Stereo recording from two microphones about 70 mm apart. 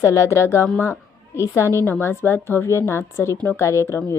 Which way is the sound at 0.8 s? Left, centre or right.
Left.